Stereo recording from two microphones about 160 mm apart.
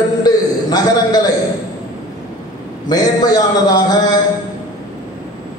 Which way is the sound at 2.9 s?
25° left (ahead or behind).